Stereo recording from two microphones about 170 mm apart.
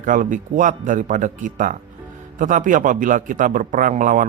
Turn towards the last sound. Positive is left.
turn(degrees=-50)  # may be behind; listen again after turning